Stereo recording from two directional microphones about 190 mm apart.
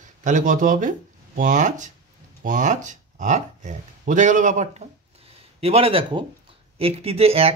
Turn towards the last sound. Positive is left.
turn(degrees=-30)  # may be behind; listen again after turning